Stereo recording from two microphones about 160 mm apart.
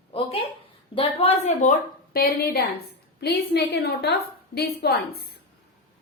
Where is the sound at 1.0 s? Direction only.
35° left (ahead or behind).